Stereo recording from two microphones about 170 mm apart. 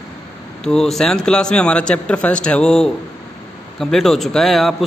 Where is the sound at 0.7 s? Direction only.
Centre (ahead or behind).